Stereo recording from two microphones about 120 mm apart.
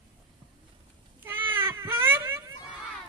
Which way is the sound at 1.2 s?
15° right (ahead or behind).